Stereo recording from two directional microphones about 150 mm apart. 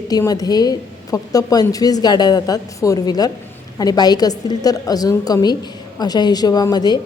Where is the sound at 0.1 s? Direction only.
25° left (ahead or behind).